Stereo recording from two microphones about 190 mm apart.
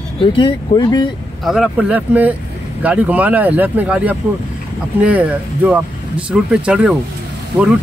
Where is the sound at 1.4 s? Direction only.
5° right (ahead or behind).